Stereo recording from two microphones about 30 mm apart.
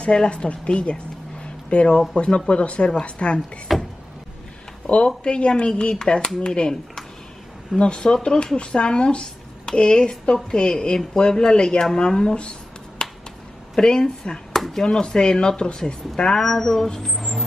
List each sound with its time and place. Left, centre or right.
0.0 s speech: left
3.7 s vehicle: centre
4.8 s speech: left
7.8 s a woman's voice: left
13.0 s finger snapping: left
13.7 s speech: left
14.5 s speech: centre
14.9 s speech: left
16.3 s speech: centre